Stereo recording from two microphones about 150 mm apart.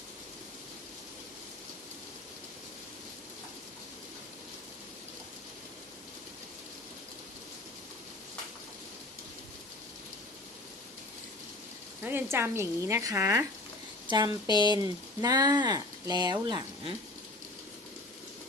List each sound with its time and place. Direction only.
12.0 s speech: 15° right (ahead or behind)
14.1 s speech: 30° right (ahead or behind)